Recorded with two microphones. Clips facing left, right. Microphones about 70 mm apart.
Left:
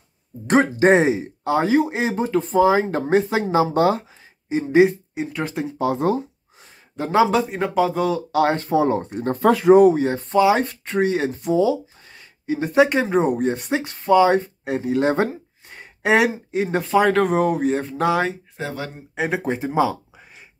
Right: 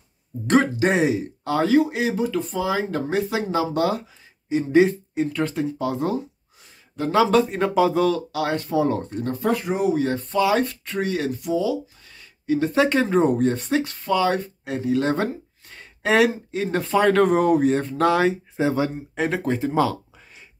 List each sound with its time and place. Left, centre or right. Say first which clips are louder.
0.7 s speech: left 4 dB; left
7.2 s speech: right 2 dB; centre
8.3 s speech: left 5 dB; left
9.4 s speech: left 11 dB; left
9.9 s speech: left 3 dB; left
15.7 s gasp: left 2 dB; left
16.8 s speech: even; centre
18.6 s speech: right 8 dB; centre
19.1 s speech: left 2 dB; centre